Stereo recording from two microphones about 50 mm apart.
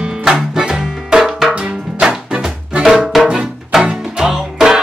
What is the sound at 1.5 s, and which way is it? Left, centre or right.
Music, centre.